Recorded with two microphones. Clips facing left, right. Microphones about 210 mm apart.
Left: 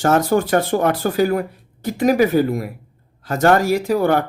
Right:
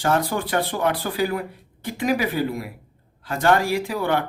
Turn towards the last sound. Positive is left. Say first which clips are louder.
# left 6 dB
turn(degrees=45)  # may be behind; listen again after turning